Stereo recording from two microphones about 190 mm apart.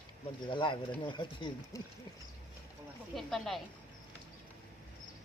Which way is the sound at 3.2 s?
Centre (ahead or behind).